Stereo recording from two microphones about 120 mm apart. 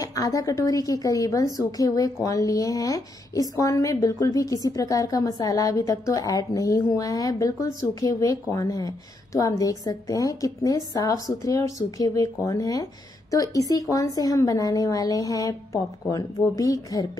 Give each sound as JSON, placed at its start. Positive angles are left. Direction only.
{"t": 0.0, "sound": "a woman's voice", "side_deg": 30}